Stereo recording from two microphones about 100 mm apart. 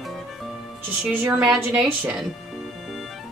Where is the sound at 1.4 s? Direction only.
5° right (ahead or behind).